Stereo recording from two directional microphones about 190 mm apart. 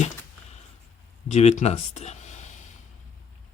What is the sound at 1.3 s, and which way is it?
Speech, 35° left (ahead or behind).